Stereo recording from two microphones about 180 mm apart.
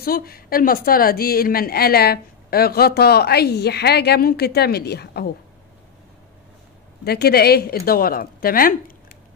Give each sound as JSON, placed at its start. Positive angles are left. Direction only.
{"t": 0.0, "sound": "a woman's voice", "side_deg": 55}
{"t": 7.1, "sound": "a woman's voice", "side_deg": 60}